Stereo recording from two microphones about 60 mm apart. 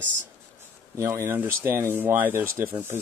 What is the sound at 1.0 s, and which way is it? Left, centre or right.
Speech, right.